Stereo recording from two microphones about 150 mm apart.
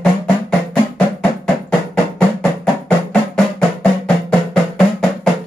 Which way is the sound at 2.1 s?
5° left (ahead or behind).